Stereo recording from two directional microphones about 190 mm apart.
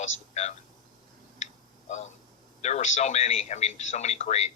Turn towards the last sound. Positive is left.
turn(degrees=35)  # may be behind; listen again after turning